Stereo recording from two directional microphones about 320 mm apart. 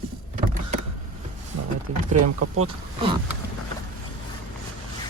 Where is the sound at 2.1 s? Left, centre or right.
Right.